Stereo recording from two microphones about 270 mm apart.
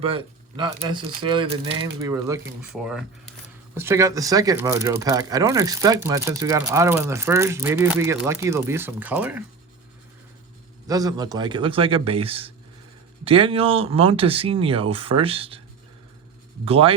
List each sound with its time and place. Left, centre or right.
0.0 s speech: centre
2.7 s speech: centre
10.8 s speech: centre
16.6 s speech: right